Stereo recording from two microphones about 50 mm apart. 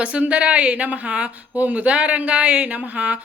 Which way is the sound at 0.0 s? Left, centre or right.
Right.